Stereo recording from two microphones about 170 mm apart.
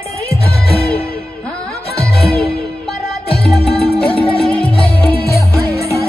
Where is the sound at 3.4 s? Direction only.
Centre (ahead or behind).